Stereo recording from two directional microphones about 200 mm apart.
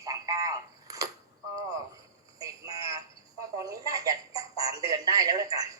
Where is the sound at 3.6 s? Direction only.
15° right (ahead or behind).